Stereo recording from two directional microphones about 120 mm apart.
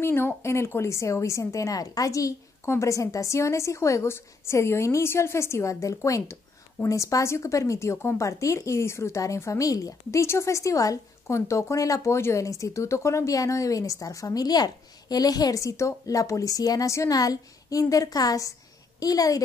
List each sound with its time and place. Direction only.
0.0 s a woman's voice: 20° left (ahead or behind)